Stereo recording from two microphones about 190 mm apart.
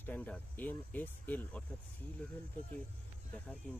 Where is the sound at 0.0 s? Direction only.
10° left (ahead or behind).